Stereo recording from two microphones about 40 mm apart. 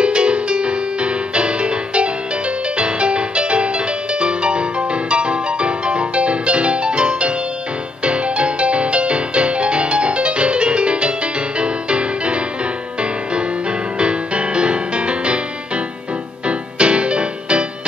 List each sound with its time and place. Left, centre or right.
0.0 s music: right